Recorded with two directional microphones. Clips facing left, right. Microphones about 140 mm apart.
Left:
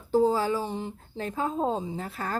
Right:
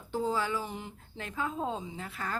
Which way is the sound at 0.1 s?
35° left (ahead or behind).